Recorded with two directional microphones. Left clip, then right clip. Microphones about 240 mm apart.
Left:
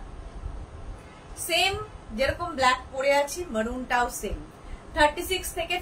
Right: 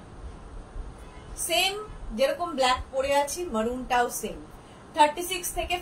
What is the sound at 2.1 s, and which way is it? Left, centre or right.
A woman's voice, centre.